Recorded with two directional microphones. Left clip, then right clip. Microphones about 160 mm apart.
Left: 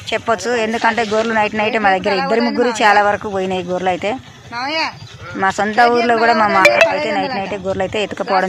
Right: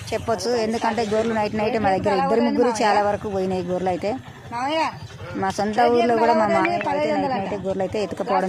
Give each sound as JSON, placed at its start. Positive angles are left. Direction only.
{"t": 0.3, "sound": "speech", "side_deg": 10}
{"t": 4.5, "sound": "speech", "side_deg": 10}